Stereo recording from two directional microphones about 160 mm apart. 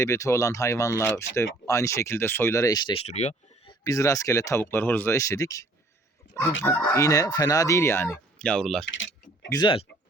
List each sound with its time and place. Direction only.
0.0 s speech: 20° left (ahead or behind)
3.1 s speech: 45° left (ahead or behind)
3.7 s speech: 20° left (ahead or behind); by 8.9 s 5° left (ahead or behind)
9.5 s speech: 30° left (ahead or behind)